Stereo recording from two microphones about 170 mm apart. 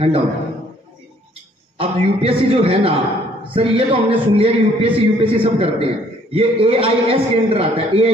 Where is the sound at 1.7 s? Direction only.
35° right (ahead or behind).